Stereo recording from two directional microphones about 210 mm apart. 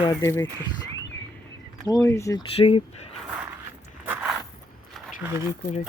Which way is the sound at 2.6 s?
25° left (ahead or behind).